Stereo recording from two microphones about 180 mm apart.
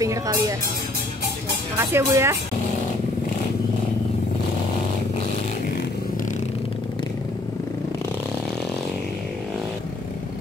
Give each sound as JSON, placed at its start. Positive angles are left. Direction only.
{"t": 0.0, "sound": "music", "side_deg": -20}
{"t": 1.8, "sound": "speech", "side_deg": -15}